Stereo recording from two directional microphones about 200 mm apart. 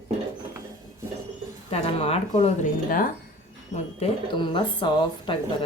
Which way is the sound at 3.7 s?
30° left (ahead or behind).